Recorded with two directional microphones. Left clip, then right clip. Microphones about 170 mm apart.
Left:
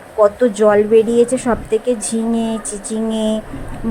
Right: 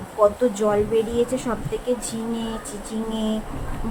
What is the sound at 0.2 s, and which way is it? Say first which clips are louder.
A woman's voice: left 6 dB; 35° left (ahead or behind).